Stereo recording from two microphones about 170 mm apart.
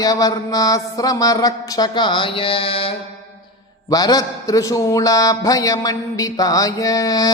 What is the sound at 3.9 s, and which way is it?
A man's voice, 20° left (ahead or behind).